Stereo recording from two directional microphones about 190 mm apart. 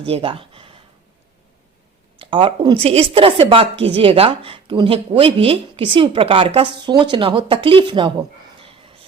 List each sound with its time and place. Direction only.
0.0 s speech: 30° right (ahead or behind)
2.1 s speech: 25° right (ahead or behind)